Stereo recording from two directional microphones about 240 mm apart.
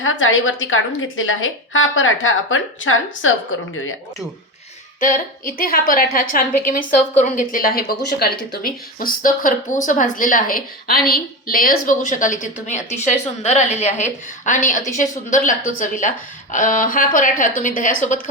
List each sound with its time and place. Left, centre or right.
0.0 s a woman's voice: left
4.9 s speech: left